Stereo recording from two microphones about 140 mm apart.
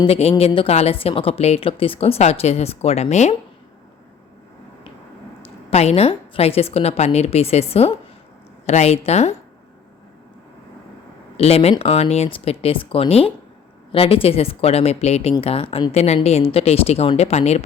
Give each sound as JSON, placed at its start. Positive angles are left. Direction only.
{"t": 0.0, "sound": "a woman's voice", "side_deg": 45}
{"t": 5.7, "sound": "a woman's voice", "side_deg": 50}
{"t": 11.3, "sound": "a woman's voice", "side_deg": 45}